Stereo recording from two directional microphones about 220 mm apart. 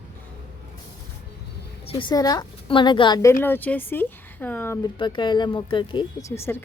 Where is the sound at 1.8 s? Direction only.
25° left (ahead or behind).